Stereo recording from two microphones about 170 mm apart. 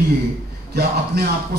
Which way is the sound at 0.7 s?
70° right (ahead or behind).